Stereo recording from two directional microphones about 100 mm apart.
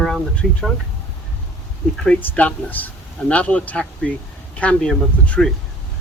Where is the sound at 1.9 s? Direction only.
10° left (ahead or behind).